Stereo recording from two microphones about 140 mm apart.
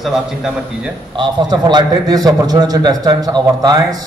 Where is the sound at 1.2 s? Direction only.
35° right (ahead or behind).